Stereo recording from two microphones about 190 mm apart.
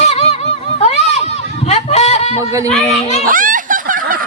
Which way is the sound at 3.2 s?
45° right (ahead or behind).